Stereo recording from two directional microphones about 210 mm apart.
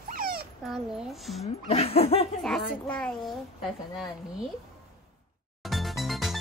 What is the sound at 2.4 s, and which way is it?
A child's voice, centre (ahead or behind).